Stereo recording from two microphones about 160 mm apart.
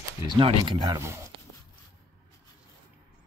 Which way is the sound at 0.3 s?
30° right (ahead or behind).